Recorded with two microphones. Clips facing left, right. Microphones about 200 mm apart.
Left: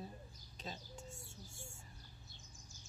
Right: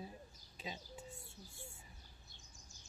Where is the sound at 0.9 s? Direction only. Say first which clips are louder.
Even; 45° left (ahead or behind).